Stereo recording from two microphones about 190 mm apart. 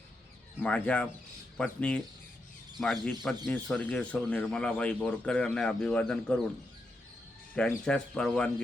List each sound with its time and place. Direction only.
0.6 s speech: 5° left (ahead or behind)
7.5 s speech: 5° left (ahead or behind)